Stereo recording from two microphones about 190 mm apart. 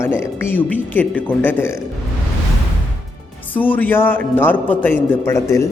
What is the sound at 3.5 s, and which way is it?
Speech, 10° left (ahead or behind).